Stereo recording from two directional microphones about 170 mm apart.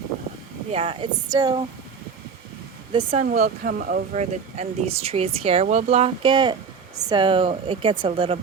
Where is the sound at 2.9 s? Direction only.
30° right (ahead or behind).